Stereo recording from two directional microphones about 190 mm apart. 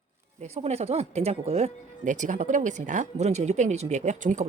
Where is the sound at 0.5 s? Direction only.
35° right (ahead or behind).